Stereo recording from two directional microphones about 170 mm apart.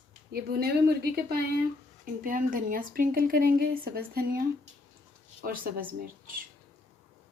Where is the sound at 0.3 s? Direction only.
65° right (ahead or behind).